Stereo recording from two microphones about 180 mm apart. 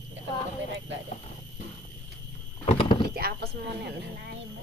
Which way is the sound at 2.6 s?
30° left (ahead or behind).